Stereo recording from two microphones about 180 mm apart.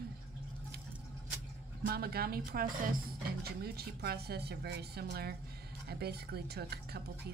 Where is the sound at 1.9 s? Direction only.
60° right (ahead or behind).